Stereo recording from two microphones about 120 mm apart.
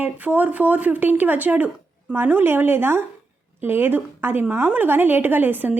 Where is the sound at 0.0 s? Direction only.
15° right (ahead or behind).